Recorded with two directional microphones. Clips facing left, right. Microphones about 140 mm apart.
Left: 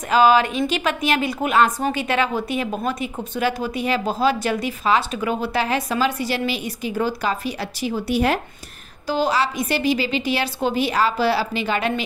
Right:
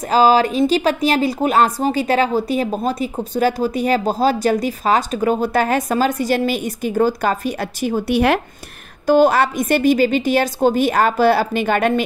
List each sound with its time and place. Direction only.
0.0 s speech: 35° right (ahead or behind); by 8.4 s 65° right (ahead or behind)
9.0 s a woman's voice: 55° right (ahead or behind)